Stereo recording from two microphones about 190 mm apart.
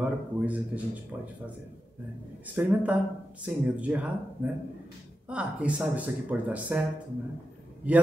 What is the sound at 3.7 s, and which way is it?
Speech, 5° right (ahead or behind).